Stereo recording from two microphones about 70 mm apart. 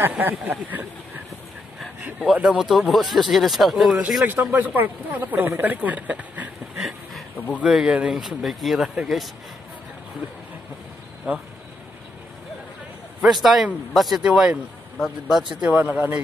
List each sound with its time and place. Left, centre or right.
0.0 s speech: right
2.4 s speech: centre
4.3 s speech: right
6.8 s a sound: centre
7.3 s speech: left
7.6 s speech: centre
8.1 s speech: centre
11.3 s speech: centre
13.2 s speech: centre
14.2 s speech: centre
15.7 s speech: right